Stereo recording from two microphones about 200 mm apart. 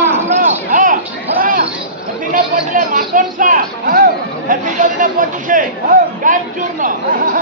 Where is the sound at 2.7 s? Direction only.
40° right (ahead or behind).